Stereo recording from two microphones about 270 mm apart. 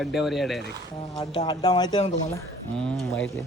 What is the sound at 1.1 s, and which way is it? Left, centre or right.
Speech, centre.